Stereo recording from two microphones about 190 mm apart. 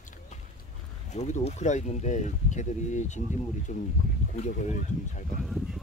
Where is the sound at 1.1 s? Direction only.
35° left (ahead or behind).